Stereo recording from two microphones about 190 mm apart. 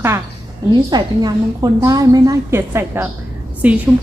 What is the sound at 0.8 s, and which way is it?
A woman's voice, 20° right (ahead or behind).